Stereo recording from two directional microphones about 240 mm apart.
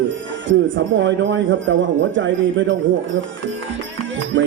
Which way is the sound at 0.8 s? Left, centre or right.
Right.